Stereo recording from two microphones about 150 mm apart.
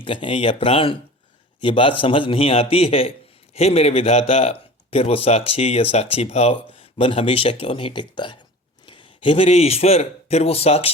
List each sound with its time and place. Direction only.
0.0 s a man's voice: 35° left (ahead or behind)